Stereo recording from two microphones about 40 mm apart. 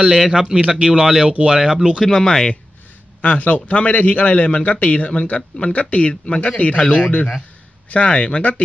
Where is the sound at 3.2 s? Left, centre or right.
Left.